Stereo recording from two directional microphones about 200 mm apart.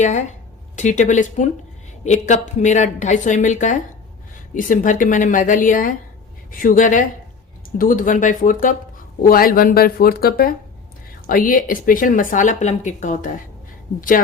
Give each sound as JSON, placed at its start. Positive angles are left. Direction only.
{"t": 0.0, "sound": "speech", "side_deg": 35}